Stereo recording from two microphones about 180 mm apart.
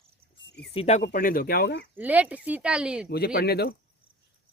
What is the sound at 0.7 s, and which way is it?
Speech, 35° left (ahead or behind).